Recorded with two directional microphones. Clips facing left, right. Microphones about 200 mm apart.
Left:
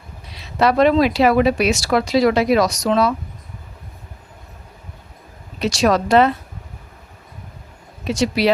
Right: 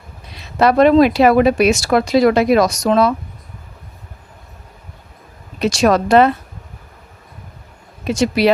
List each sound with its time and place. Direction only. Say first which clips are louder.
0.3 s speech: right 3 dB; 50° right (ahead or behind)
5.5 s speech: right 3 dB; 50° right (ahead or behind)
8.0 s speech: right 3 dB; 55° right (ahead or behind)